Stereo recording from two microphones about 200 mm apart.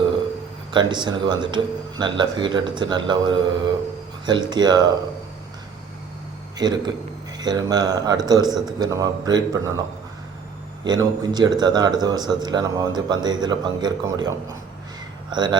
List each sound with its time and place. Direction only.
0.7 s speech: 20° right (ahead or behind)
6.6 s speech: 20° right (ahead or behind)
10.8 s speech: 20° right (ahead or behind)